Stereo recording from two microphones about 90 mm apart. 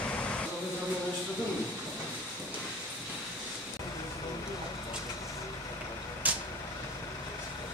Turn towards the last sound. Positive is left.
turn(degrees=-15)  # may be behind; listen again after turning